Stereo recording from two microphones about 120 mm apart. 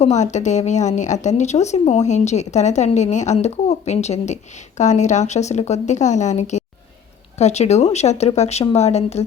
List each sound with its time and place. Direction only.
0.0 s a woman's voice: 75° left (ahead or behind)
4.8 s a woman's voice: 80° left; by 9.2 s 65° left (ahead or behind)